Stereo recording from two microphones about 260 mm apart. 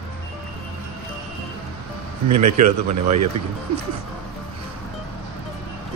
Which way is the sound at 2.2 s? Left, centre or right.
Right.